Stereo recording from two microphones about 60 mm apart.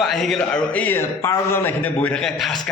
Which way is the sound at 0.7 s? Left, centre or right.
Left.